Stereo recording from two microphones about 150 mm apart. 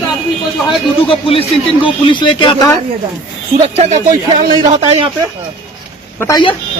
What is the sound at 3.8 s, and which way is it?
Speech, 50° right (ahead or behind).